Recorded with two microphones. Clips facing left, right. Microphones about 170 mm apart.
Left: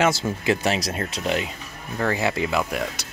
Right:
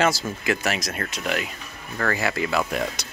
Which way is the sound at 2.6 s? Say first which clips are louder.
Even; 5° left (ahead or behind).